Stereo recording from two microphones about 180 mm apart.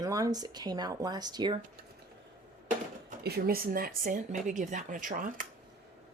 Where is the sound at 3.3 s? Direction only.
60° right (ahead or behind).